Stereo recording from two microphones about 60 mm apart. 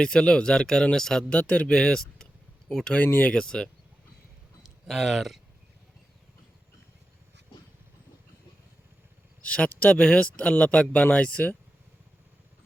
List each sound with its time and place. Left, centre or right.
0.0 s speech: centre
4.9 s speech: centre
9.4 s speech: left